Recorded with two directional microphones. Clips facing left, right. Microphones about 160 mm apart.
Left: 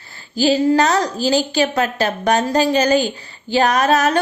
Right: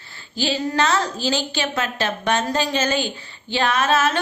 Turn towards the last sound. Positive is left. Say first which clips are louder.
# left 4 dB
turn(degrees=40)  # may be behind; listen again after turning